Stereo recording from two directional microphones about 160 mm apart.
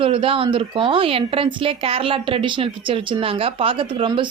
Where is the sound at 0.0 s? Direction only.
35° right (ahead or behind).